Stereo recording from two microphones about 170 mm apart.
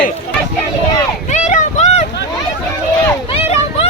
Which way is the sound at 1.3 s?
45° left (ahead or behind).